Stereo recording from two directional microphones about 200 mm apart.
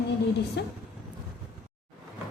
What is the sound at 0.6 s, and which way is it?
Speech, 55° left (ahead or behind).